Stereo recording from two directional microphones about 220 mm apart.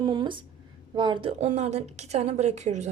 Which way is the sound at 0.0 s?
20° right (ahead or behind).